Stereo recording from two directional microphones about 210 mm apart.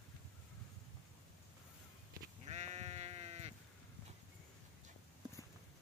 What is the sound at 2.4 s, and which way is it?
Sheep, 30° right (ahead or behind).